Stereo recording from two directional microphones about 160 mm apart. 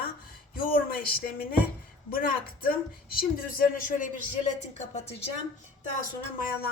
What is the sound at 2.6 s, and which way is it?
Speech, 65° left (ahead or behind).